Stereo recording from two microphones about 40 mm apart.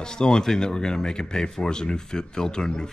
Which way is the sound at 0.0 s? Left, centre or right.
Centre.